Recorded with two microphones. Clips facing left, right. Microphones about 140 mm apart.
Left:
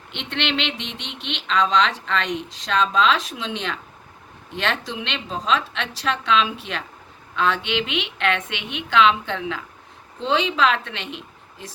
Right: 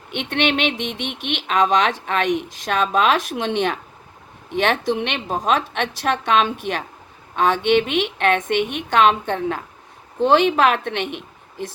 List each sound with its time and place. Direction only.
0.1 s a woman's voice: 55° right (ahead or behind)